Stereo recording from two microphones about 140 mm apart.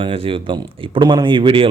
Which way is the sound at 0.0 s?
40° right (ahead or behind).